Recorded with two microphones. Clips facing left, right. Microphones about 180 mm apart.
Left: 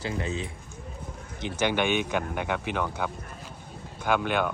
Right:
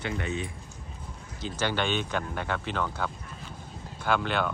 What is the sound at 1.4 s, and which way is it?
Speech, 15° left (ahead or behind).